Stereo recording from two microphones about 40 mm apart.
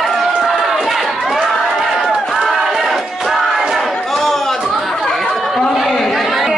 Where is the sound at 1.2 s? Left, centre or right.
Centre.